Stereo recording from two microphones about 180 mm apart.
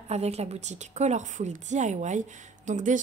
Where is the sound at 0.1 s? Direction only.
35° right (ahead or behind).